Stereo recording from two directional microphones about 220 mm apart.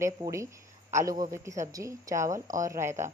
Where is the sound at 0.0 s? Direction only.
15° right (ahead or behind).